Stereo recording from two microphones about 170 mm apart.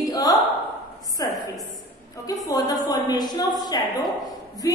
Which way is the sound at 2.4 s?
20° left (ahead or behind).